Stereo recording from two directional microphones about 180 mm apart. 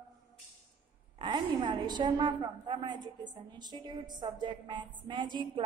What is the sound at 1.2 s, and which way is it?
A woman's voice, 25° right (ahead or behind).